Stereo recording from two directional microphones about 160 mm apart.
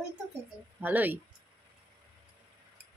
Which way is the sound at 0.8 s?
10° right (ahead or behind).